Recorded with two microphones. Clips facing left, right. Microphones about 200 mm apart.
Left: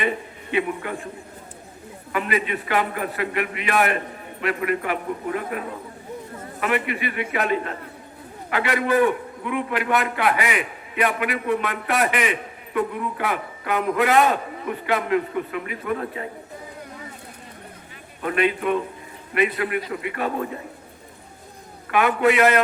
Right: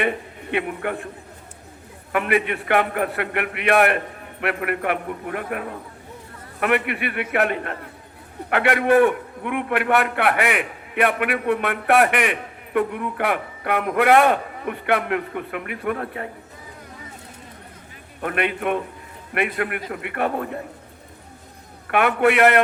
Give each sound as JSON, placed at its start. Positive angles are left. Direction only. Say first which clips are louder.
{"t": 0.5, "sound": "a man's voice", "louder": "even", "side_deg": -60}
{"t": 2.1, "sound": "a man's voice", "louder": "right 3 dB", "side_deg": -60}
{"t": 18.2, "sound": "a man's voice", "louder": "left 2 dB", "side_deg": -55}
{"t": 21.8, "sound": "a man's voice", "louder": "right 1 dB", "side_deg": -65}